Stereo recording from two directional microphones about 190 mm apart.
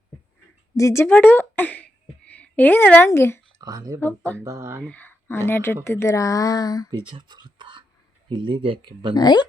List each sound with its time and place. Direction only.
0.8 s speech: 15° left (ahead or behind)
3.6 s speech: 20° right (ahead or behind)
4.0 s speech: 10° left (ahead or behind)
4.4 s speech: 15° right (ahead or behind)
4.8 s speech: 10° left (ahead or behind)
7.1 s whispering: 25° right (ahead or behind)
8.3 s speech: 25° right (ahead or behind)
9.1 s speech: 20° left (ahead or behind)